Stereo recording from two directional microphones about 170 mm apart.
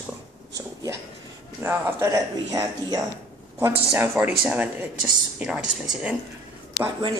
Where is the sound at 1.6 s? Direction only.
15° right (ahead or behind).